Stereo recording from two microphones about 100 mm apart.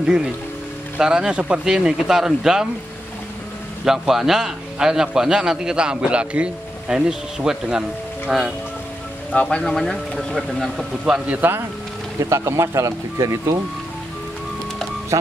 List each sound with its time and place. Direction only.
0.0 s a man's voice: 5° right (ahead or behind)
3.8 s a man's voice: 5° right (ahead or behind)
9.3 s speech: 10° left (ahead or behind)
11.1 s a man's voice: 10° right (ahead or behind)
12.2 s speech: 30° right (ahead or behind)